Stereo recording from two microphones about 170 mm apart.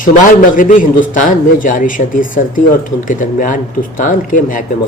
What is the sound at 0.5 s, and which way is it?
A man's voice, 50° left (ahead or behind).